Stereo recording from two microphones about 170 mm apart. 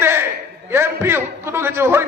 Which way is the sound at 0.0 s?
15° right (ahead or behind).